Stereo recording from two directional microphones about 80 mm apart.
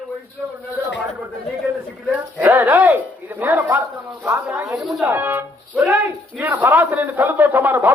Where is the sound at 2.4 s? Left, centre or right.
Right.